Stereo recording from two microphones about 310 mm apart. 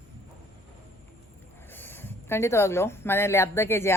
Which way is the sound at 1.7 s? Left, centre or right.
Centre.